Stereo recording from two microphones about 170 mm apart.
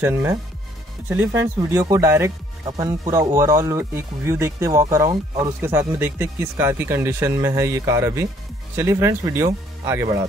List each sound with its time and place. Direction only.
0.0 s speech: 15° right (ahead or behind)